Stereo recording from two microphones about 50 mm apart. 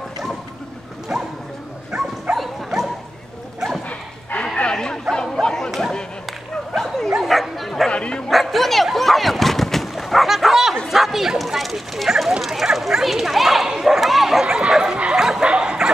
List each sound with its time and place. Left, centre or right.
1.1 s bow-wow: centre
5.1 s bow-wow: centre
6.7 s bow-wow: centre
7.9 s bow-wow: left
8.3 s a sound: centre
10.9 s bow-wow: centre
13.7 s a sound: centre
14.4 s bow-wow: centre